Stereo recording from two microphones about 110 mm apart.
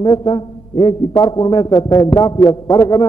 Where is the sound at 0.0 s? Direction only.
40° left (ahead or behind).